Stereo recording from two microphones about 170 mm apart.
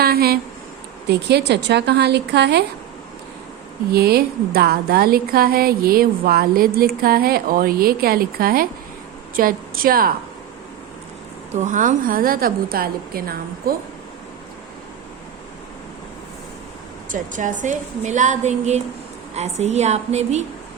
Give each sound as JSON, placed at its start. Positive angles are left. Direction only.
{"t": 0.0, "sound": "speech", "side_deg": -65}
{"t": 1.0, "sound": "speech", "side_deg": -75}
{"t": 3.9, "sound": "a woman's voice", "side_deg": -65}
{"t": 11.6, "sound": "a woman's voice", "side_deg": -50}
{"t": 17.1, "sound": "a woman's voice", "side_deg": -50}